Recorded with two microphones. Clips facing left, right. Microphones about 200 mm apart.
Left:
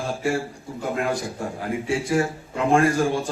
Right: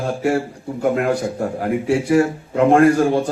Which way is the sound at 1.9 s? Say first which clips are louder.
Right 7 dB; 65° right (ahead or behind).